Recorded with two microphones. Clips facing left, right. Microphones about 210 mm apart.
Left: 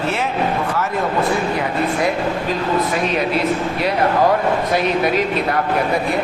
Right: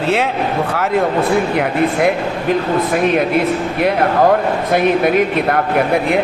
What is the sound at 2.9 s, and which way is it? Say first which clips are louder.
Speech: right 5 dB; 55° right (ahead or behind).